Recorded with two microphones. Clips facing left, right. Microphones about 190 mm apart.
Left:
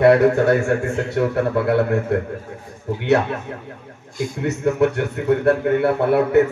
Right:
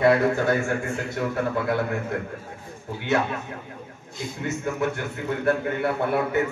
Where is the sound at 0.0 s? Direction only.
75° left (ahead or behind).